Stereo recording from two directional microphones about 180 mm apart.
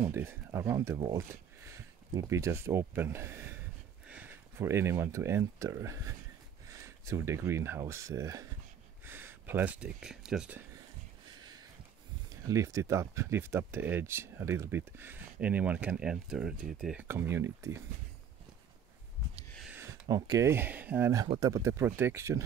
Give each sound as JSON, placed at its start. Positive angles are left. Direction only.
{"t": 0.0, "sound": "speech", "side_deg": -15}
{"t": 12.3, "sound": "speech", "side_deg": -15}
{"t": 19.7, "sound": "a sound", "side_deg": -15}
{"t": 20.2, "sound": "speech", "side_deg": -20}